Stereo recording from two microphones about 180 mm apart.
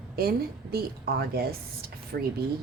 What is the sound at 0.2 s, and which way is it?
A woman's voice, 60° right (ahead or behind).